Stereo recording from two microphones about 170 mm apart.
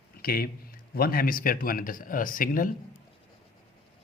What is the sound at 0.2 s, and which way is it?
Speech, 60° left (ahead or behind).